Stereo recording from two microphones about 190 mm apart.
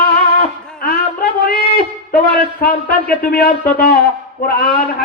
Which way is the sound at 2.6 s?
50° left (ahead or behind).